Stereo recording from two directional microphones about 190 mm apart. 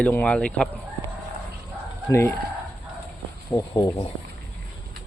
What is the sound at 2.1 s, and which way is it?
Speech, 15° left (ahead or behind).